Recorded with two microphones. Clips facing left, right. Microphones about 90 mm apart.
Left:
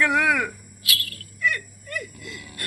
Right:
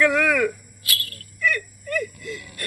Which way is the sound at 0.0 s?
15° left (ahead or behind).